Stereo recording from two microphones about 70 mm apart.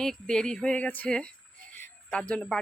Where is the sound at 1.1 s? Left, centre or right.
Centre.